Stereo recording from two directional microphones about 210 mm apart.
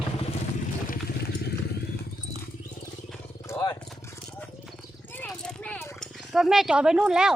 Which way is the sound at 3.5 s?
15° left (ahead or behind).